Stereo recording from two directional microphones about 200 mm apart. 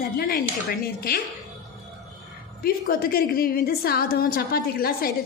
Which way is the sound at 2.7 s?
50° left (ahead or behind).